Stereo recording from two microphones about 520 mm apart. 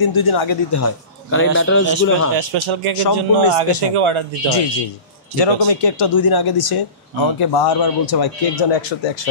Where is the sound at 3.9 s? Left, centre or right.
Right.